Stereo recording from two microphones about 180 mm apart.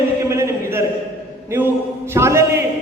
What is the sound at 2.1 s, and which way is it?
Speech, 15° right (ahead or behind).